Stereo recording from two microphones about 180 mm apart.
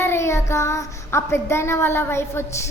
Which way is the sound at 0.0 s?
15° left (ahead or behind).